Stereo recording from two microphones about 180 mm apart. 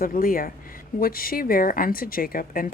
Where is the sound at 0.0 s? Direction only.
50° left (ahead or behind).